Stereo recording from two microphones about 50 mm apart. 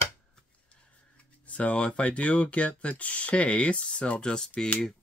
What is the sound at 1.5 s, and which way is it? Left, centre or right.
Speech, left.